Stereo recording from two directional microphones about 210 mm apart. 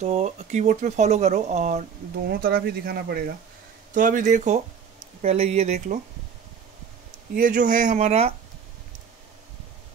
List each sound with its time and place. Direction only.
0.0 s speech: 30° right (ahead or behind)
2.2 s speech: 45° right (ahead or behind)
7.3 s speech: 40° right (ahead or behind)